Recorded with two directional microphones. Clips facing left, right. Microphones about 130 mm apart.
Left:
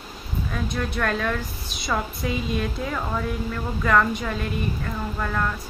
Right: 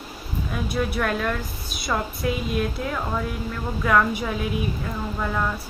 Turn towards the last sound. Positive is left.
turn(degrees=-10)  # may be behind; listen again after turning